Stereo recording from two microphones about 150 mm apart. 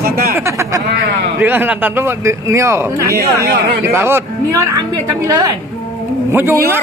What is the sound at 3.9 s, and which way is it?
A woman's voice, 15° right (ahead or behind).